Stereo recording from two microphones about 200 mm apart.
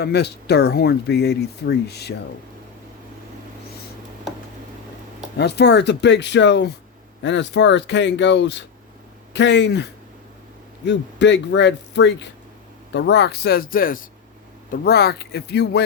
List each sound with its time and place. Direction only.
0.0 s speech: 55° left (ahead or behind)
5.4 s a man's voice: 55° left (ahead or behind)